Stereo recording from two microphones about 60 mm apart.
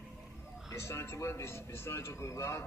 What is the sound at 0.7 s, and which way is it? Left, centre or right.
A man's voice, left.